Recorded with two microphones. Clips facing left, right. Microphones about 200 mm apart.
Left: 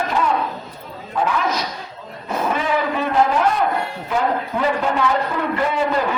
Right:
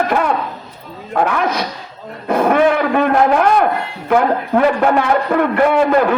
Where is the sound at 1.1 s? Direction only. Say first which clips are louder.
Right 4 dB; 65° right (ahead or behind).